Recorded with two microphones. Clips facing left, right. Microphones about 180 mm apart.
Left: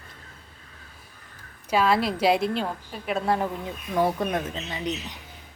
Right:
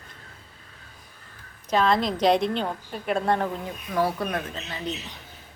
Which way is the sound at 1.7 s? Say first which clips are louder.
Even; 5° left (ahead or behind).